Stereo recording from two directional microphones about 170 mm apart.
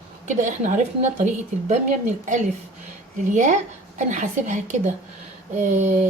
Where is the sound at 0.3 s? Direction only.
45° right (ahead or behind).